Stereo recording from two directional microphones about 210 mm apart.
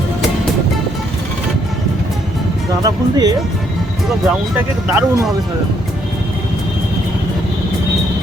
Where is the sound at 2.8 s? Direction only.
20° right (ahead or behind).